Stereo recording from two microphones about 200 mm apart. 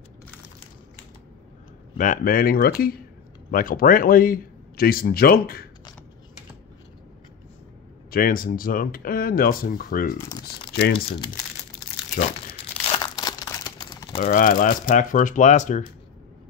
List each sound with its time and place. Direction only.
2.0 s a man's voice: 45° left (ahead or behind)
8.1 s a man's voice: 45° left (ahead or behind)
13.0 s crumpling: 20° left (ahead or behind)
14.2 s speech: 40° left (ahead or behind)